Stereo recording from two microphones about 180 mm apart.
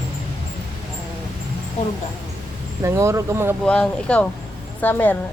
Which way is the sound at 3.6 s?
5° left (ahead or behind).